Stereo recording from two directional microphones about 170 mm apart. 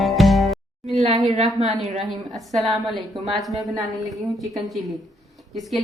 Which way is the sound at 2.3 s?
Centre (ahead or behind).